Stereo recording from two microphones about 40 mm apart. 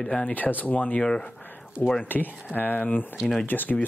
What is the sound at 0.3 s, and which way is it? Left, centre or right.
Speech, left.